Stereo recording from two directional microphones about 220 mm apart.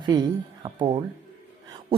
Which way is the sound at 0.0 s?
20° right (ahead or behind).